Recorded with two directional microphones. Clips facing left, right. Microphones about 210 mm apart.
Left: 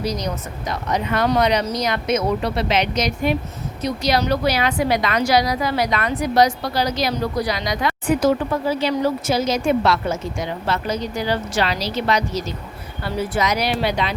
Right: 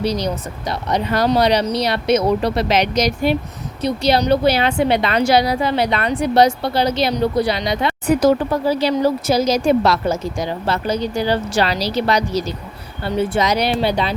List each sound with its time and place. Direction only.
0.0 s a woman's voice: 30° right (ahead or behind)
8.0 s a woman's voice: 40° right (ahead or behind)